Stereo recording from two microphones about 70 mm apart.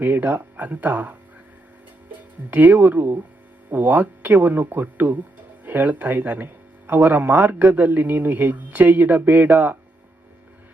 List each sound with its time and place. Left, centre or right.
0.0 s speech: right
2.5 s speech: right